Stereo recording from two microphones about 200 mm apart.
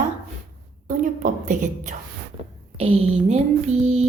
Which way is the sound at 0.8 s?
40° right (ahead or behind).